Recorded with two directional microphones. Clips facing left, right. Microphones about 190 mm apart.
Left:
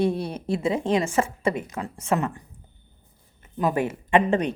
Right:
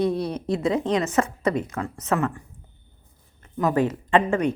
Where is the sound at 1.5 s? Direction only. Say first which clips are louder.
Right 4 dB; 15° left (ahead or behind).